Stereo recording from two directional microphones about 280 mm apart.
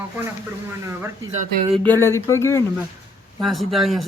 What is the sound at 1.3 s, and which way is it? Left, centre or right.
Speech, right.